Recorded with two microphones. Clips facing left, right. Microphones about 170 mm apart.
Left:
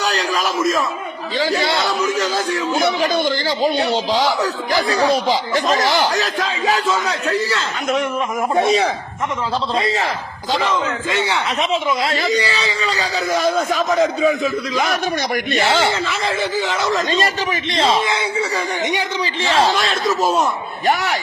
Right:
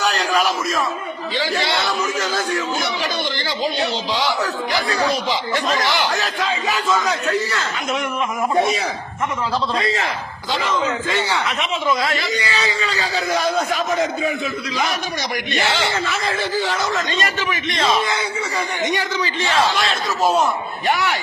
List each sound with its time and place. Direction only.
0.1 s a sound: 35° left (ahead or behind)
0.6 s speech: 45° left (ahead or behind)
2.1 s speech: 35° left (ahead or behind)
2.8 s speech: 50° left (ahead or behind); by 7.6 s 30° left (ahead or behind)
9.7 s speech: 30° left (ahead or behind); by 14.9 s 50° left (ahead or behind)
15.5 s speech: 30° left (ahead or behind)
20.8 s speech: 40° left (ahead or behind)